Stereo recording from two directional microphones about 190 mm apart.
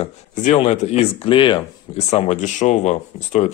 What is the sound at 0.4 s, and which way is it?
Speech, 35° left (ahead or behind).